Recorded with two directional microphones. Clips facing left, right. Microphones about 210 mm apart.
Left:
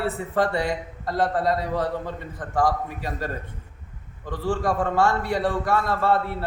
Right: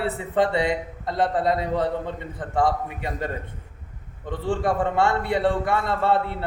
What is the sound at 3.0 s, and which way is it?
A man's voice, 20° right (ahead or behind).